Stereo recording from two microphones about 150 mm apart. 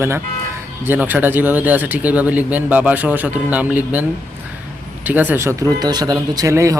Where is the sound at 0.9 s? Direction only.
10° right (ahead or behind).